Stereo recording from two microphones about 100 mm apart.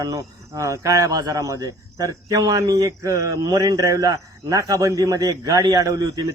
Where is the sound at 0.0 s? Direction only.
35° right (ahead or behind).